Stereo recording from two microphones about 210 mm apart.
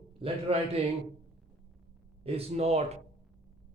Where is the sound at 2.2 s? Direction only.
30° right (ahead or behind).